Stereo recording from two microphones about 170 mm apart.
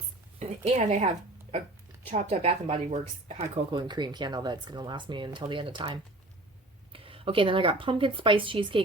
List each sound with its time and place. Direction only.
0.3 s speech: 40° right (ahead or behind)